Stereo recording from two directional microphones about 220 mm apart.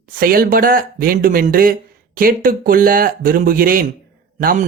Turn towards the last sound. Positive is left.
turn(degrees=-40)  # may be behind; listen again after turning